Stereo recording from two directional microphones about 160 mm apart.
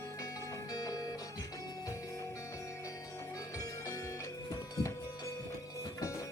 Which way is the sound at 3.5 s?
20° left (ahead or behind).